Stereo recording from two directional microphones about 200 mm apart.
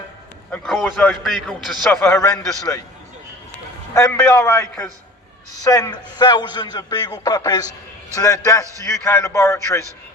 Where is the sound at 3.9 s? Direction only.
15° left (ahead or behind).